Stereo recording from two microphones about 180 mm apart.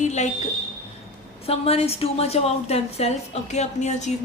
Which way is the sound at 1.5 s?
35° left (ahead or behind).